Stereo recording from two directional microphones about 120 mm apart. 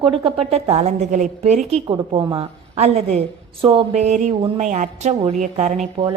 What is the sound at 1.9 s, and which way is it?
A woman's voice, 45° right (ahead or behind).